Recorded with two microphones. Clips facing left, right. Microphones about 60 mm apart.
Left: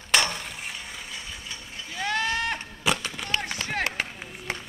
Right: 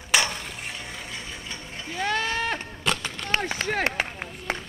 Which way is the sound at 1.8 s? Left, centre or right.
Right.